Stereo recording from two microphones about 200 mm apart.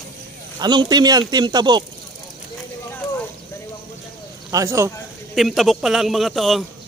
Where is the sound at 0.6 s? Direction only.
20° right (ahead or behind).